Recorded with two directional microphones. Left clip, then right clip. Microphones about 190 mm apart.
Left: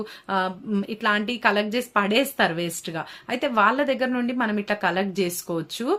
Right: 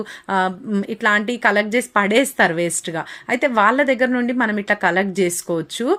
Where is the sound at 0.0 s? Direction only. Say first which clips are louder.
Right 5 dB; 30° right (ahead or behind).